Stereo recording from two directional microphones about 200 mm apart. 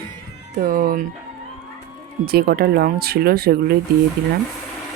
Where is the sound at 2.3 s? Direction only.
50° right (ahead or behind).